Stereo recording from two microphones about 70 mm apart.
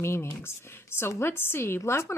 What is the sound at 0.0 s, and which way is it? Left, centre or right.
Speech, left.